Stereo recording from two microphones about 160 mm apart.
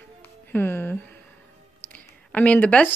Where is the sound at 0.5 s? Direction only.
15° left (ahead or behind).